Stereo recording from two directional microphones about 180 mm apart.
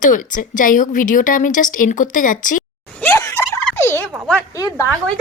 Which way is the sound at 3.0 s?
15° left (ahead or behind).